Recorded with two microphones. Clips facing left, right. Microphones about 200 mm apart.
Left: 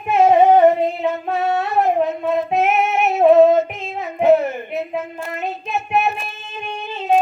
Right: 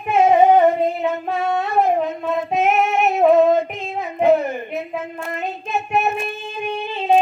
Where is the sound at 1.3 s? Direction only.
5° left (ahead or behind).